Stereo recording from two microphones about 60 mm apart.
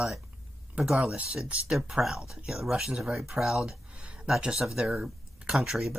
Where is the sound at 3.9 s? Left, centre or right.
Centre.